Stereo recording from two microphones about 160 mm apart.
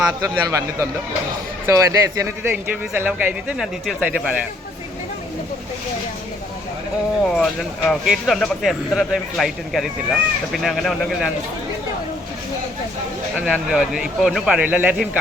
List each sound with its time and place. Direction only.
0.4 s a man's voice: 20° right (ahead or behind)
7.3 s speech: 5° left (ahead or behind)
13.4 s speech: 5° right (ahead or behind)